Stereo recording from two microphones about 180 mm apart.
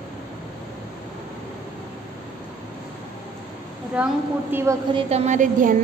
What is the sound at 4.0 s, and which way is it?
Speech, 5° right (ahead or behind).